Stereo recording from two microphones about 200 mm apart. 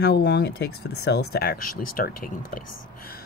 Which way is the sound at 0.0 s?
55° left (ahead or behind).